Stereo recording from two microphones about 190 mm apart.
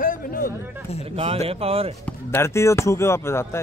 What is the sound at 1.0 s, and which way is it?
Speech, 30° right (ahead or behind).